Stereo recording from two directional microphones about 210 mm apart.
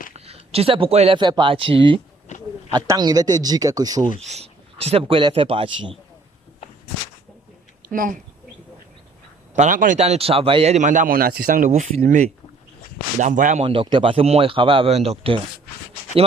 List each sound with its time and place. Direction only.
0.1 s speech: 30° right (ahead or behind)
4.3 s speech: 30° right (ahead or behind)
7.9 s speech: 40° right (ahead or behind)
9.6 s a man's voice: 40° right (ahead or behind)